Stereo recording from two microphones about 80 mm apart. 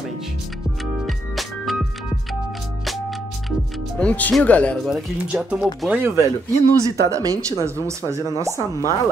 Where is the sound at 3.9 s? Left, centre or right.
Centre.